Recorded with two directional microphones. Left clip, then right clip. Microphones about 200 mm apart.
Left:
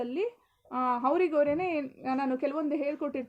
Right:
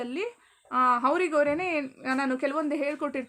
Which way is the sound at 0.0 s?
10° right (ahead or behind).